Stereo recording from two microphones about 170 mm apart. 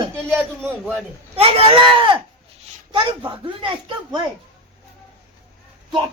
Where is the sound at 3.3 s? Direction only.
30° right (ahead or behind).